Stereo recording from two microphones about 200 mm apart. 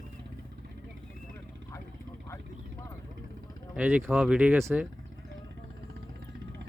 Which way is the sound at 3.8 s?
5° right (ahead or behind).